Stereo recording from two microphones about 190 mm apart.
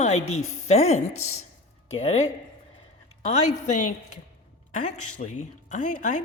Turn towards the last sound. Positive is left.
turn(degrees=40)  # may be behind; listen again after turning